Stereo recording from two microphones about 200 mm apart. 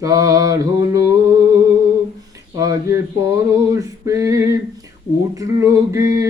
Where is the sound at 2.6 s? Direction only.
15° right (ahead or behind).